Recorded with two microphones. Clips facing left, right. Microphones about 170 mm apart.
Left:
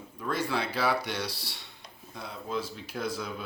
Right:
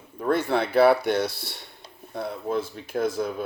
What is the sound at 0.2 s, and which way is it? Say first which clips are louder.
Speech: right 8 dB; 60° right (ahead or behind).